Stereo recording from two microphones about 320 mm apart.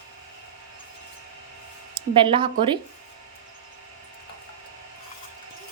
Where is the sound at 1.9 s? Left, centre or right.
Centre.